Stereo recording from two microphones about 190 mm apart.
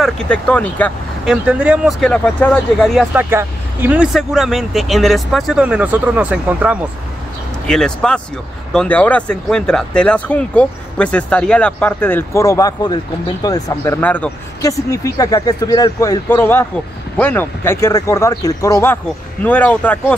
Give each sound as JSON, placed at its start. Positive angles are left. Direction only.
{"t": 0.0, "sound": "speech", "side_deg": 5}
{"t": 1.2, "sound": "speech", "side_deg": -5}
{"t": 3.3, "sound": "speech", "side_deg": -10}